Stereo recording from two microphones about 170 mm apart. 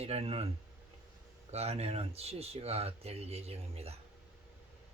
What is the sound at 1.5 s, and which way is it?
Speech, 40° right (ahead or behind).